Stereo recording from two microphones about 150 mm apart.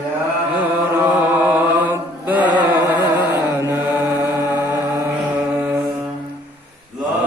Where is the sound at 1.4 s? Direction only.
10° right (ahead or behind).